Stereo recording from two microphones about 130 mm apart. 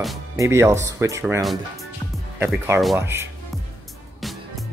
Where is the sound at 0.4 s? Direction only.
20° right (ahead or behind).